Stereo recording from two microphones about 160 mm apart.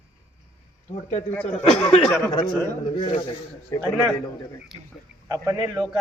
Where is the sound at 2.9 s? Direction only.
30° left (ahead or behind).